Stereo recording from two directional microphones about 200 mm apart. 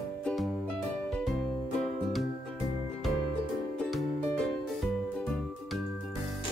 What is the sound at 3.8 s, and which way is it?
Music, centre (ahead or behind).